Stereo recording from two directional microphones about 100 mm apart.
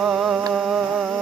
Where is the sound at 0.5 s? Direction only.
10° right (ahead or behind).